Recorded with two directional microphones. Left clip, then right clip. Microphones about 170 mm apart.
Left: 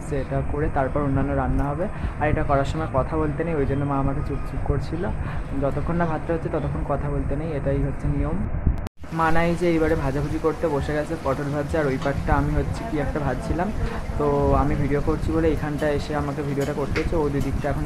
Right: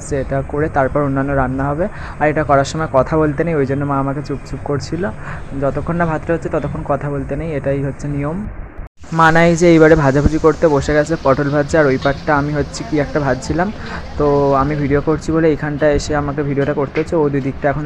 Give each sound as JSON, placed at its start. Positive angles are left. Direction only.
{"t": 0.1, "sound": "speech", "side_deg": -30}
{"t": 5.6, "sound": "speech", "side_deg": -25}
{"t": 9.1, "sound": "speech", "side_deg": -40}